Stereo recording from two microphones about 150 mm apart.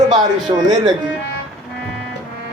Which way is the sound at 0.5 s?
30° right (ahead or behind).